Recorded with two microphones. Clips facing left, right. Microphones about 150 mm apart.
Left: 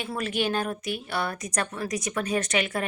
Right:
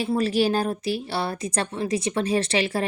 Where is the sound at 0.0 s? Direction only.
30° right (ahead or behind).